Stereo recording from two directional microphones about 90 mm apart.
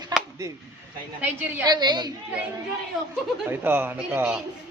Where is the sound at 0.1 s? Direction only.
50° right (ahead or behind).